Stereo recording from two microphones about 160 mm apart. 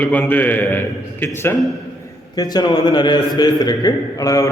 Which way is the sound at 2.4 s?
25° left (ahead or behind).